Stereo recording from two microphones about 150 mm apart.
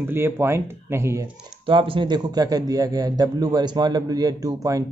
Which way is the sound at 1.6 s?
35° right (ahead or behind).